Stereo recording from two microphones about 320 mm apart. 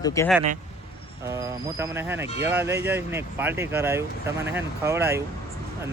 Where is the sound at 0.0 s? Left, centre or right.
Centre.